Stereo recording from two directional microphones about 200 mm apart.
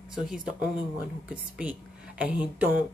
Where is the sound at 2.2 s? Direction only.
5° right (ahead or behind).